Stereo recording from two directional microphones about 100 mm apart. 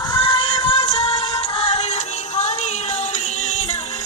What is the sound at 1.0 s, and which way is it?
Music, 70° left (ahead or behind).